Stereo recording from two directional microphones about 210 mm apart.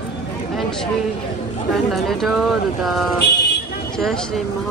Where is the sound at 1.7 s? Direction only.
Centre (ahead or behind).